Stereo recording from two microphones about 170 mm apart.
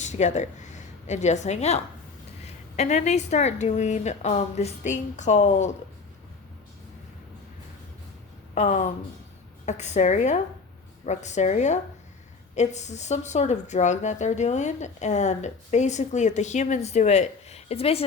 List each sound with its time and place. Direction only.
0.0 s a woman's voice: 45° left (ahead or behind)
8.5 s speech: 45° left (ahead or behind)